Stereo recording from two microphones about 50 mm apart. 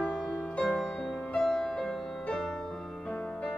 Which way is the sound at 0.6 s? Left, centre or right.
Centre.